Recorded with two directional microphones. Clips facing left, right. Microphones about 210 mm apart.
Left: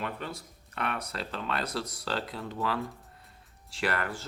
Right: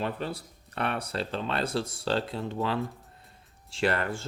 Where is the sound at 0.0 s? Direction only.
35° right (ahead or behind).